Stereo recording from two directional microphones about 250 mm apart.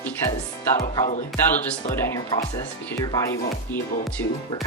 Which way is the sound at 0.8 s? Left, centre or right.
Left.